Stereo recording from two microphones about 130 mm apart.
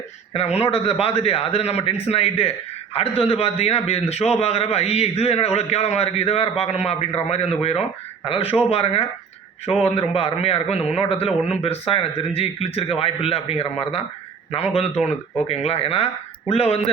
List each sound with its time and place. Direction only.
0.3 s a man's voice: 55° left (ahead or behind)